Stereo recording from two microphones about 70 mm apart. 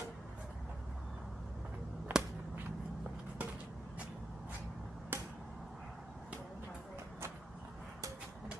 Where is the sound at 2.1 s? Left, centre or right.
Right.